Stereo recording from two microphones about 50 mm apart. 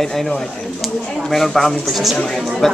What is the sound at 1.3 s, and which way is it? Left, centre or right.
Speech, centre.